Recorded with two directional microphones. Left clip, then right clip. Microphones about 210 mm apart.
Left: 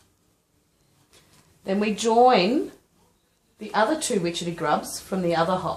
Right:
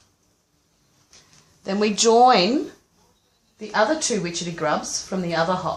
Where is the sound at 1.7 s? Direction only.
30° right (ahead or behind).